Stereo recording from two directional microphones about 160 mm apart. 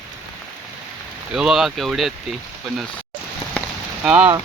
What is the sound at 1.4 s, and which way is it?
Speech, centre (ahead or behind).